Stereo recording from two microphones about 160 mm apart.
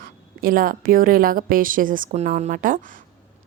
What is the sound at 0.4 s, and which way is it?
A woman's voice, 60° right (ahead or behind).